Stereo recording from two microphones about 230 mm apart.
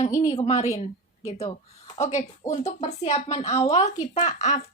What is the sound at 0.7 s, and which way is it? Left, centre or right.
A woman's voice, left.